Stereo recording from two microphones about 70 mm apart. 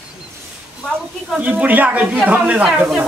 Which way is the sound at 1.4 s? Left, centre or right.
Right.